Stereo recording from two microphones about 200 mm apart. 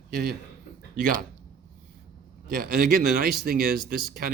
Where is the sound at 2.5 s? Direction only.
45° right (ahead or behind).